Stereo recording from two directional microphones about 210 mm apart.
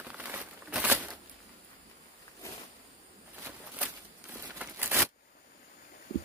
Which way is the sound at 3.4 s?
10° right (ahead or behind).